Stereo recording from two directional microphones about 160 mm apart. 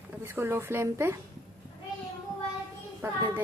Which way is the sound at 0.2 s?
15° right (ahead or behind).